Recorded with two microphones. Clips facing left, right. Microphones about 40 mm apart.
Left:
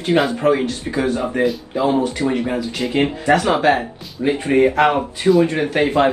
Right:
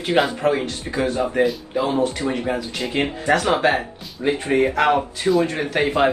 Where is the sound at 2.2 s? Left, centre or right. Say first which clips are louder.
Left 4 dB; right.